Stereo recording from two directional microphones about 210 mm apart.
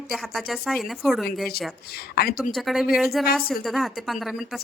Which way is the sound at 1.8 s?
45° left (ahead or behind).